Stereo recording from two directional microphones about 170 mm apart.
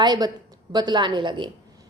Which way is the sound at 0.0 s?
25° right (ahead or behind).